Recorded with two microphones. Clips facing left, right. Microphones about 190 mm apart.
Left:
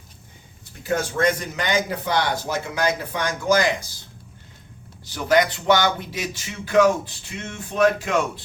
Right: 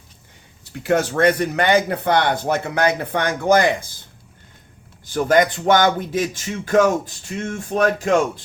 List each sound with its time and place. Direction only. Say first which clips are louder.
0.8 s speech: right 5 dB; 70° right (ahead or behind)
5.0 s speech: right 3 dB; 50° right (ahead or behind)